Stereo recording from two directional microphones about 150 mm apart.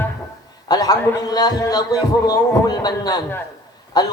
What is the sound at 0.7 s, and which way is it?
Speech, 25° left (ahead or behind).